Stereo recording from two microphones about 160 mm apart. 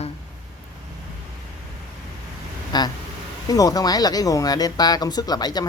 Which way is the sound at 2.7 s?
25° left (ahead or behind).